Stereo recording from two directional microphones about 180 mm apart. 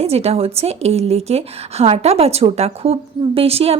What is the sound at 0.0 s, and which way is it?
Speech, 35° right (ahead or behind).